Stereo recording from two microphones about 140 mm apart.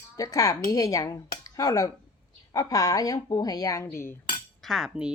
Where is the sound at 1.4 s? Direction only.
25° left (ahead or behind).